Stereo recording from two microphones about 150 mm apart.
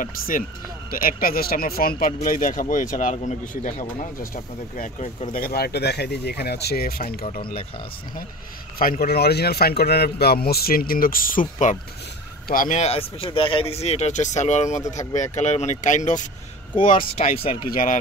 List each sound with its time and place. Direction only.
0.8 s speech: 75° left (ahead or behind); by 5.1 s 60° left (ahead or behind)
5.3 s speech: 85° left
8.7 s speech: 75° left (ahead or behind)
11.5 s speech: 50° left (ahead or behind)
12.4 s speech: 60° left (ahead or behind)
16.9 s speech: 40° left (ahead or behind)
17.6 s speech: 70° left (ahead or behind)